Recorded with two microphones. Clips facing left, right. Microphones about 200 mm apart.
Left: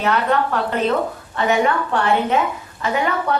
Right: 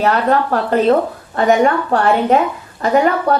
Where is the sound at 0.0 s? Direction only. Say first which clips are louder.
Right 4 dB; 35° right (ahead or behind).